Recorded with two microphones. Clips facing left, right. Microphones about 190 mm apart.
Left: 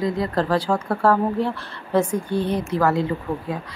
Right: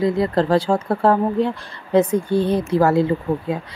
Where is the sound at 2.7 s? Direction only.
30° right (ahead or behind).